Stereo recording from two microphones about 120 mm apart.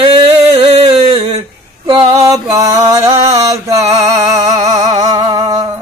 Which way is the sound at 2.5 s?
20° right (ahead or behind).